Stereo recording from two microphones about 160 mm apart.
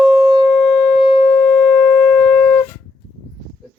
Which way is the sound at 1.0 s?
35° left (ahead or behind).